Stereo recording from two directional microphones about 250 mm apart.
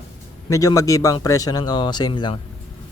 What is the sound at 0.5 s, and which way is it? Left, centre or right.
Speech, centre.